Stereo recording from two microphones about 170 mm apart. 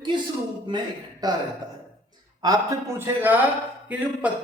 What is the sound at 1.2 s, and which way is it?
Speech, 25° right (ahead or behind).